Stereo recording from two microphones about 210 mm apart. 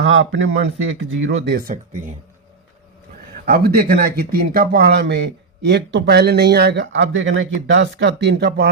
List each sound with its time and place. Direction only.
0.0 s speech: 60° right (ahead or behind); by 2.1 s 40° right (ahead or behind)
3.4 s speech: 45° right (ahead or behind)